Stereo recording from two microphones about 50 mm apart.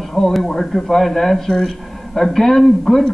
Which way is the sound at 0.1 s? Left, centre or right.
Centre.